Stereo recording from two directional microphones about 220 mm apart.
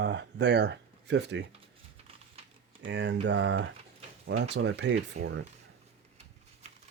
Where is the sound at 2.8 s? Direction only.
55° right (ahead or behind).